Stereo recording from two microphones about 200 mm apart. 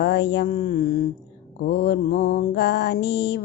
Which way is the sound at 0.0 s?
55° left (ahead or behind).